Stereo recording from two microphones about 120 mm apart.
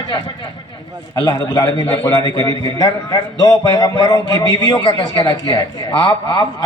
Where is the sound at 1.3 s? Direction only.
30° left (ahead or behind).